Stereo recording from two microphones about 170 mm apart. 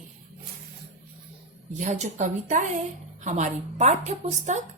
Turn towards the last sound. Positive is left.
turn(degrees=-45)  # may be behind; listen again after turning